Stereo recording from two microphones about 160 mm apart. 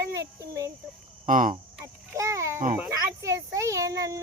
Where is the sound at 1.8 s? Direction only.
20° right (ahead or behind).